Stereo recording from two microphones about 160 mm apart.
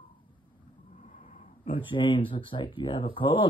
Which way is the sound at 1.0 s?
45° left (ahead or behind).